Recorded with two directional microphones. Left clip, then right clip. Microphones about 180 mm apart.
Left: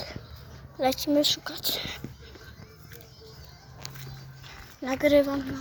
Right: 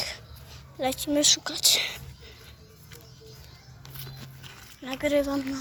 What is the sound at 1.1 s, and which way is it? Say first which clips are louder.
Speech: right 2 dB; 10° right (ahead or behind).